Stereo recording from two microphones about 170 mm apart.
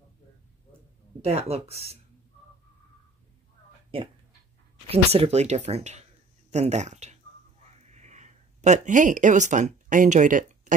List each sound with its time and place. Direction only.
1.2 s speech: 40° right (ahead or behind)
4.8 s speech: 35° right (ahead or behind)
7.8 s a sound: 40° right (ahead or behind)